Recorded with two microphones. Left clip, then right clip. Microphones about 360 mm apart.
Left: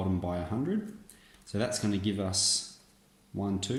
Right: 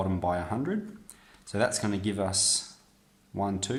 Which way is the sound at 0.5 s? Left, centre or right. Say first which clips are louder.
Right 2 dB; right.